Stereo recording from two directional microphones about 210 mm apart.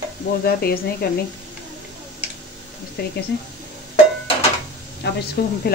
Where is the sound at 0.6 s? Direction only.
45° left (ahead or behind).